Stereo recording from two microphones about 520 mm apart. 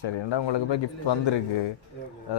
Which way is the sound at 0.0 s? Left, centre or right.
Left.